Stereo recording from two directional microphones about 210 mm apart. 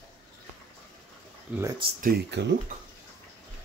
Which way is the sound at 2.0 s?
50° right (ahead or behind).